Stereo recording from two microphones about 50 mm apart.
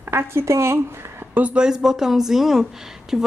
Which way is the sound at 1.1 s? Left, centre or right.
Right.